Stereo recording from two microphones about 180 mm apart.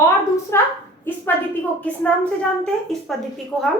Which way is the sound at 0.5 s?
15° left (ahead or behind).